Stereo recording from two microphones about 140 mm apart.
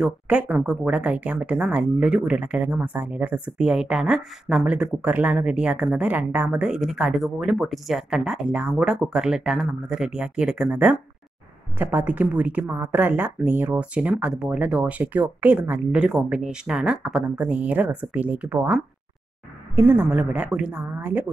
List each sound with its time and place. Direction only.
0.0 s a woman's voice: 10° right (ahead or behind)